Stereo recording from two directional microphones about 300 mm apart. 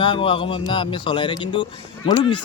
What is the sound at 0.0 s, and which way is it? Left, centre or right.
A man's voice, centre.